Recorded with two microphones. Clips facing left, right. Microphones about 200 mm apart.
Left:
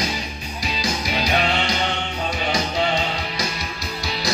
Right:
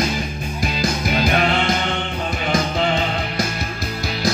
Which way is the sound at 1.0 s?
50° right (ahead or behind).